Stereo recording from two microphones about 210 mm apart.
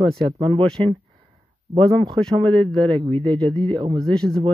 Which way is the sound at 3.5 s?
20° right (ahead or behind).